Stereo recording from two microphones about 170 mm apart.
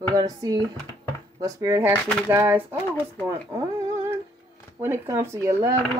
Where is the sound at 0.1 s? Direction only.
20° right (ahead or behind).